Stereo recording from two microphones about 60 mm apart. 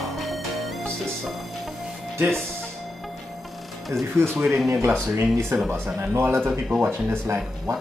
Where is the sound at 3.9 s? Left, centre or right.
Right.